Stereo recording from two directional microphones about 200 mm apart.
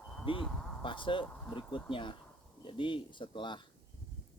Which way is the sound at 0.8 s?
25° left (ahead or behind).